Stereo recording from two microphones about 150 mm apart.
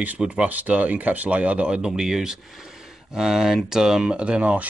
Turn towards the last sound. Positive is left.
turn(degrees=-10)  # may be behind; listen again after turning